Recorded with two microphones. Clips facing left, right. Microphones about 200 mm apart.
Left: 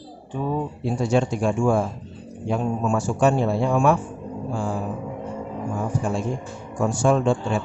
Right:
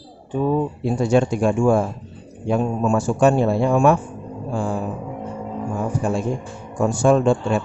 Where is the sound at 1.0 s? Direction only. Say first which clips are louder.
Right 4 dB; 55° right (ahead or behind).